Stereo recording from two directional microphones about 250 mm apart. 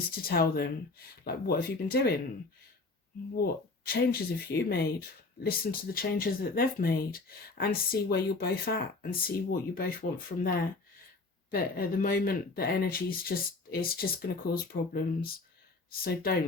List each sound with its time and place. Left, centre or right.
0.1 s speech: left
3.3 s speech: left